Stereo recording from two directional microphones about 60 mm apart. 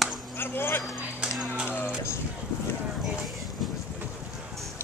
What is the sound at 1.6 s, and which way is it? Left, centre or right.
Music, left.